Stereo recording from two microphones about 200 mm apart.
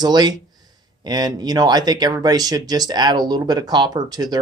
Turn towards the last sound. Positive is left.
turn(degrees=-20)  # may be behind; listen again after turning